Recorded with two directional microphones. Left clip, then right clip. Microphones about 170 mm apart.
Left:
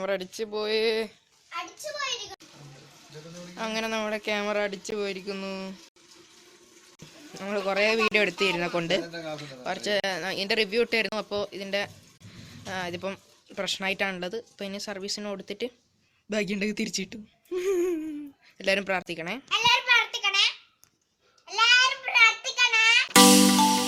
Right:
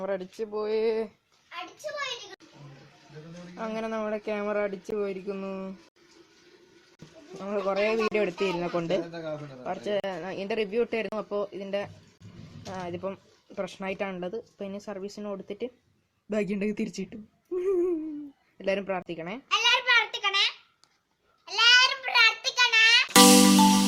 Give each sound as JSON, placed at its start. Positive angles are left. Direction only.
{"t": 0.0, "sound": "speech", "side_deg": 0}
{"t": 3.6, "sound": "speech", "side_deg": -5}
{"t": 7.4, "sound": "speech", "side_deg": 0}
{"t": 17.6, "sound": "a sound", "side_deg": 10}
{"t": 18.5, "sound": "speech", "side_deg": 0}
{"t": 19.5, "sound": "a sound", "side_deg": -60}
{"t": 21.4, "sound": "music", "side_deg": -5}